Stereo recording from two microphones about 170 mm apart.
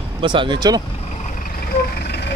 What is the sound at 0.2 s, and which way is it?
Speech, 30° right (ahead or behind).